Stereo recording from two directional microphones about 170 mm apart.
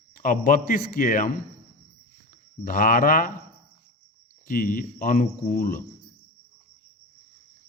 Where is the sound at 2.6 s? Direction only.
55° left (ahead or behind).